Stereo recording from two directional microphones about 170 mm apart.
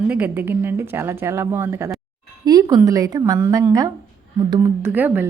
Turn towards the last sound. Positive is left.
turn(degrees=-10)  # may be behind; listen again after turning